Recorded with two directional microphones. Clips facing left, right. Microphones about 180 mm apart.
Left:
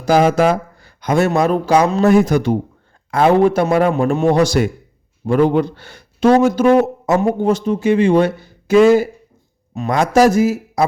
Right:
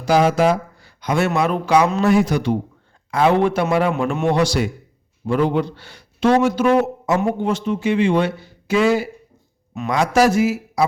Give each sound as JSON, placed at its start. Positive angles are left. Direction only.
{"t": 0.0, "sound": "a man's voice", "side_deg": 50}